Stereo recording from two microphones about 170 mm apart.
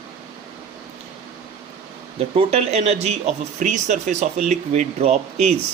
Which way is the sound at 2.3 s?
40° right (ahead or behind).